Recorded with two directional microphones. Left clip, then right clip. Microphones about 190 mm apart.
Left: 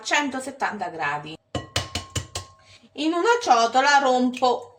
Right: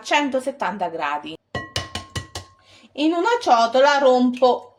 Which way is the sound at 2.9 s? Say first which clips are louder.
Right 1 dB; 40° right (ahead or behind).